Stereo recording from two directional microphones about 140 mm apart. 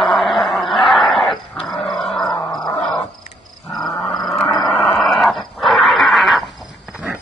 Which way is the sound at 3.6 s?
Centre (ahead or behind).